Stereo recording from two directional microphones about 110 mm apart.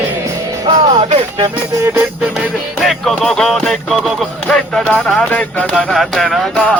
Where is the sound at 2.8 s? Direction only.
Centre (ahead or behind).